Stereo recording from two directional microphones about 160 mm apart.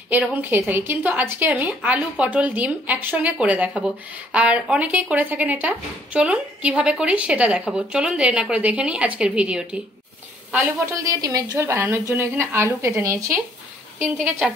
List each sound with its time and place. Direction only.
0.1 s a woman's voice: 10° right (ahead or behind)
11.1 s a woman's voice: 20° right (ahead or behind)